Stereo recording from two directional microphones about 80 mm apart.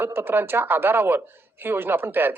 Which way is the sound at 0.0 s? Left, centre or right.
Right.